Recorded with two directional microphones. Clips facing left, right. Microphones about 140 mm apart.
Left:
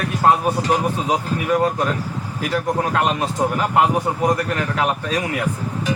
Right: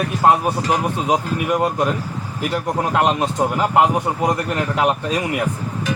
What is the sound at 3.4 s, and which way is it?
Speech, 15° right (ahead or behind).